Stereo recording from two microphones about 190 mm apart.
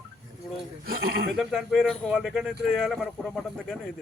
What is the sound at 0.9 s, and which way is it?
Speech, 50° right (ahead or behind).